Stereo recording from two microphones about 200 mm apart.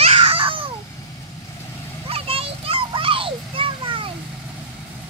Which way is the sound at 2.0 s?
30° right (ahead or behind).